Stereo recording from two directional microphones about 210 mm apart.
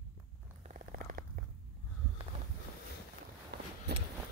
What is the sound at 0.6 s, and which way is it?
Purr, 40° right (ahead or behind).